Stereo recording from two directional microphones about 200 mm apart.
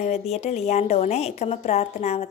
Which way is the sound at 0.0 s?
35° left (ahead or behind).